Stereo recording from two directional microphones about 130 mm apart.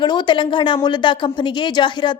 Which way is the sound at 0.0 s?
35° left (ahead or behind).